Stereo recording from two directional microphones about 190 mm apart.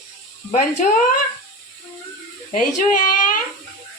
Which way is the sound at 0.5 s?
40° left (ahead or behind).